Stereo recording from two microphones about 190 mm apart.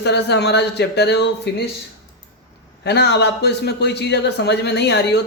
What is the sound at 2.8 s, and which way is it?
A man's voice, 60° left (ahead or behind).